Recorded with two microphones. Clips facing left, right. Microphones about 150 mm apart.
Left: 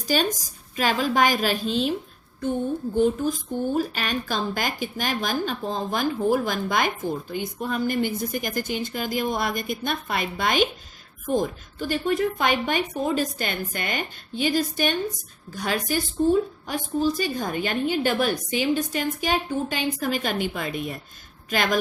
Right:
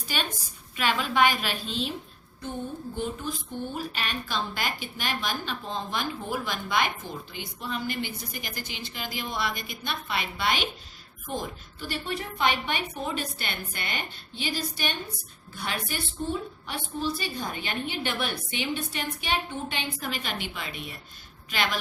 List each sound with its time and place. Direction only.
0.1 s a woman's voice: 40° left (ahead or behind)
2.9 s speech: 45° left (ahead or behind)